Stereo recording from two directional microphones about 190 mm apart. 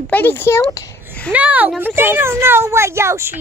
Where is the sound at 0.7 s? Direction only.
15° left (ahead or behind).